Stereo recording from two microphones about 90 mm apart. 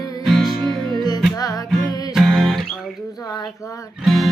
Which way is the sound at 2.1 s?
Centre (ahead or behind).